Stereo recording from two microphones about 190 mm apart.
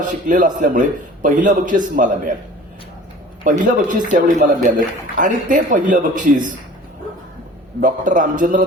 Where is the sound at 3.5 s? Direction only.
45° right (ahead or behind).